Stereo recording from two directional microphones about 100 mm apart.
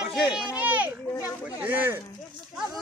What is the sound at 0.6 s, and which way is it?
A man's voice, 15° right (ahead or behind).